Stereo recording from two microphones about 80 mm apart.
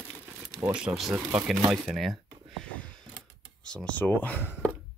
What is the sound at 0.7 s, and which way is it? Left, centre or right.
Speech, centre.